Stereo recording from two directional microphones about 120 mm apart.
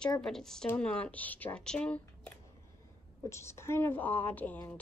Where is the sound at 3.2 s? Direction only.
25° left (ahead or behind).